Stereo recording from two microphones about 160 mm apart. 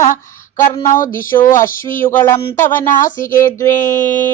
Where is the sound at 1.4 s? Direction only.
15° left (ahead or behind).